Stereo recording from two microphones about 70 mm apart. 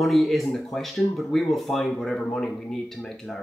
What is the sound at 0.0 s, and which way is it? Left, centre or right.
Speech, centre.